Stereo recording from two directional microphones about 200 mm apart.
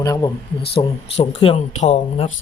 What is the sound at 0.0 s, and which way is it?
Speech, 20° left (ahead or behind).